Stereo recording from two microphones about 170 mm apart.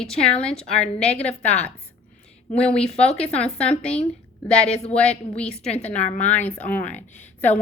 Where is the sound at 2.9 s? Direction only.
40° left (ahead or behind).